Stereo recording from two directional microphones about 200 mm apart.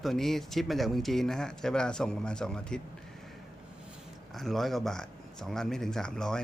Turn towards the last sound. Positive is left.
turn(degrees=5)  # may be behind; listen again after turning